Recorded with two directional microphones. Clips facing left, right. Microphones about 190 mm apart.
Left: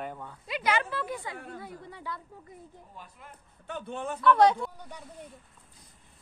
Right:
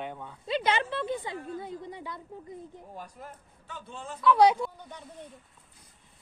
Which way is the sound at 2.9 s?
40° right (ahead or behind).